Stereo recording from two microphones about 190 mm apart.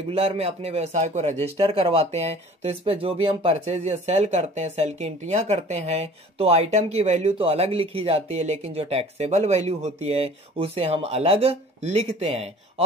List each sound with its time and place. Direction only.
0.1 s a man's voice: 30° right (ahead or behind)